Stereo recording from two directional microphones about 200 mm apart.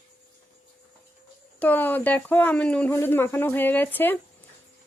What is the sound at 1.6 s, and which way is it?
Speech, 10° left (ahead or behind).